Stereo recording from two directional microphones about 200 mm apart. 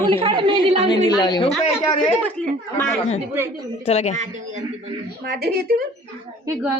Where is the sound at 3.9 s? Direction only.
35° left (ahead or behind).